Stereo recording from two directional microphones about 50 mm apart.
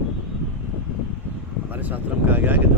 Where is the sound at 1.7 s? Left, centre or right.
Right.